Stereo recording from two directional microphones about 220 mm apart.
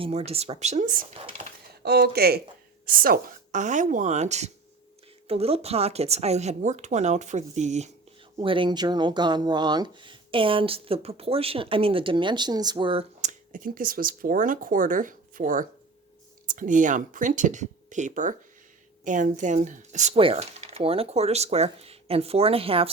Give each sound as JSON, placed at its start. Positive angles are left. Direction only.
{"t": 0.3, "sound": "speech", "side_deg": -30}
{"t": 13.5, "sound": "speech", "side_deg": -40}